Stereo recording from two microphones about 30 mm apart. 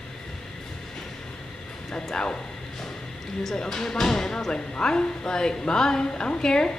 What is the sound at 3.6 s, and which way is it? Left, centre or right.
A man's voice, centre.